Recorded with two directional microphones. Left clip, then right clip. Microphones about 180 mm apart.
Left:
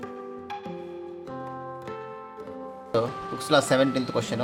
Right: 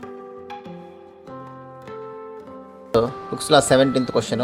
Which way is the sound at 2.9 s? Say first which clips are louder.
Right 6 dB; 40° right (ahead or behind).